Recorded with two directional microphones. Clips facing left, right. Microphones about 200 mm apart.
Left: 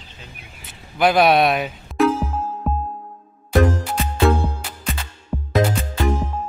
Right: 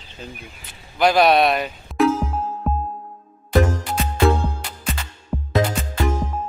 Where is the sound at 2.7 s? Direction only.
Centre (ahead or behind).